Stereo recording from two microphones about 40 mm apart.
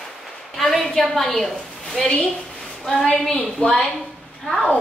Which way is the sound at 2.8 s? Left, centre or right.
Centre.